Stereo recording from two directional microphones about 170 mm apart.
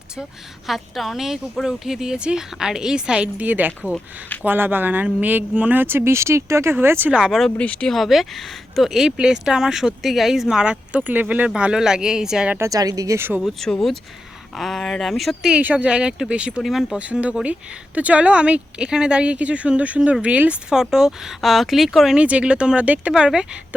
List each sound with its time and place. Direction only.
0.7 s speech: centre (ahead or behind)
12.5 s speech: 20° right (ahead or behind)
13.4 s speech: centre (ahead or behind)